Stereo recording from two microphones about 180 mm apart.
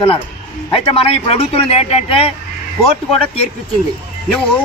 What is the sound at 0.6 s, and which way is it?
Speech, 30° left (ahead or behind).